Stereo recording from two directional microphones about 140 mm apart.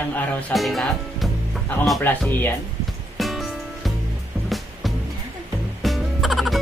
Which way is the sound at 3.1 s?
Centre (ahead or behind).